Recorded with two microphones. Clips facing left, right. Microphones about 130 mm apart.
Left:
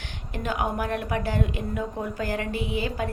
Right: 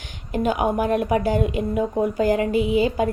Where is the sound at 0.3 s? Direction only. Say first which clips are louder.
Right 7 dB; 15° right (ahead or behind).